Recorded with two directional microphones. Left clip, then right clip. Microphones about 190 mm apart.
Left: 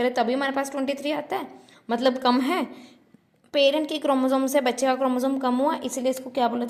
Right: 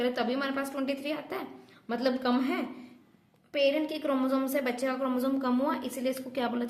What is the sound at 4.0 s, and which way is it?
A woman's voice, 35° left (ahead or behind).